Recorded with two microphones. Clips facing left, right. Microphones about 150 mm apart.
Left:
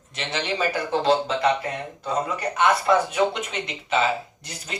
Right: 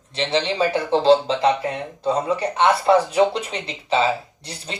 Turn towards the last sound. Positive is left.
turn(degrees=-30)  # may be behind; listen again after turning